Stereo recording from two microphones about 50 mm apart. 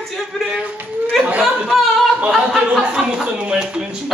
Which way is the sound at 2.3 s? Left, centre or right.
Centre.